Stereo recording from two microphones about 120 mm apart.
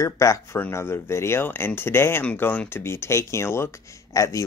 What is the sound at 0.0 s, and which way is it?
Speech, 25° left (ahead or behind).